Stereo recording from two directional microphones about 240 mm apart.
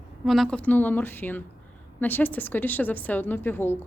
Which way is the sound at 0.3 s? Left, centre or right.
Centre.